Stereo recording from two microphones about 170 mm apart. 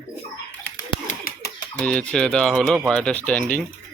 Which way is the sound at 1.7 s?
5° left (ahead or behind).